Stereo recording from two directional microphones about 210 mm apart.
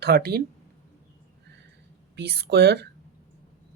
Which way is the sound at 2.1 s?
50° right (ahead or behind).